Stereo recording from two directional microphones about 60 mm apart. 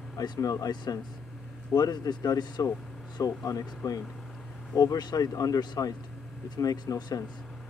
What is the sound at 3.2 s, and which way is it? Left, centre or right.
Speech, left.